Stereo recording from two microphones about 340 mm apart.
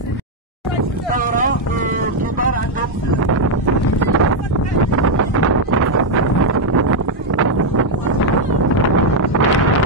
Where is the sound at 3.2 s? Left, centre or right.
Right.